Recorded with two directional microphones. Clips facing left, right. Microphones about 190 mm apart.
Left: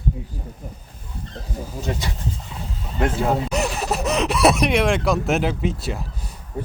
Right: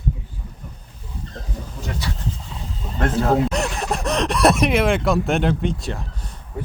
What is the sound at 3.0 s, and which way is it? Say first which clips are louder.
Speech: right 2 dB; 5° left (ahead or behind).